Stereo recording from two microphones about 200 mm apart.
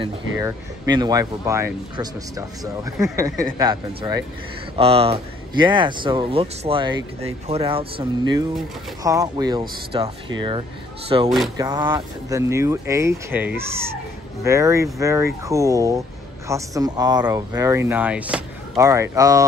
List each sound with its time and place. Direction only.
0.4 s speech: 15° right (ahead or behind)
8.0 s speech: 20° right (ahead or behind)